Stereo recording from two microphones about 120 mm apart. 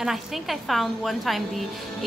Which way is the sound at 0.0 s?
Centre (ahead or behind).